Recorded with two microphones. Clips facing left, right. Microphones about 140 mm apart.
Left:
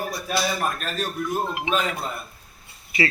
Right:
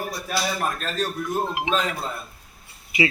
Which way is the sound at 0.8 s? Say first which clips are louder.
Right 1 dB; 10° left (ahead or behind).